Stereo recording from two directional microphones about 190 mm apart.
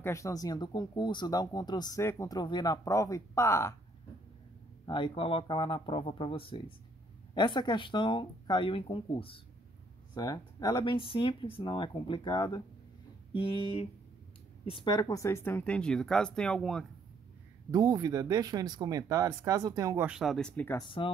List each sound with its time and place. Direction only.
0.0 s speech: 15° left (ahead or behind)
4.8 s a woman's voice: 25° left (ahead or behind); by 16.8 s 5° left (ahead or behind)
17.6 s speech: 20° right (ahead or behind)
20.1 s speech: centre (ahead or behind)